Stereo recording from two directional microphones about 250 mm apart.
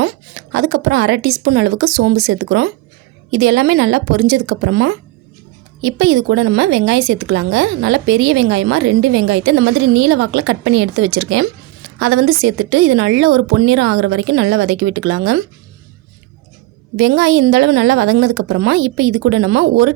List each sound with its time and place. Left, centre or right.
0.5 s a woman's voice: right
17.0 s a woman's voice: right